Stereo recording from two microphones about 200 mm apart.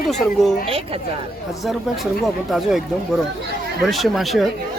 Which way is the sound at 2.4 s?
Centre (ahead or behind).